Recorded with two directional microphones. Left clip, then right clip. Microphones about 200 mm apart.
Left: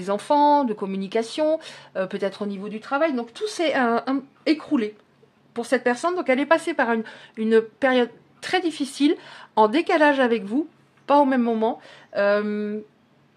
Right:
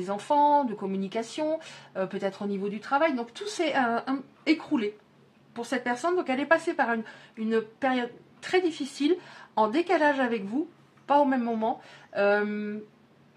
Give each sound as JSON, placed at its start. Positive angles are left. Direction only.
{"t": 0.0, "sound": "a woman's voice", "side_deg": 40}